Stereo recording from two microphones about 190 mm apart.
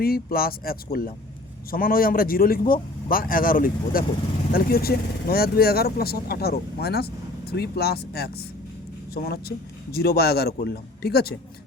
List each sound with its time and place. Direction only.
0.0 s a man's voice: 50° left (ahead or behind)